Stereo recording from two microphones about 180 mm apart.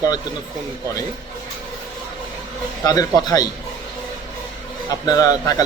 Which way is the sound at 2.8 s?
20° left (ahead or behind).